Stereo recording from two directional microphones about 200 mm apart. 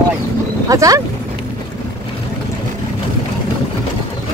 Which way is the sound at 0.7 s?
15° right (ahead or behind).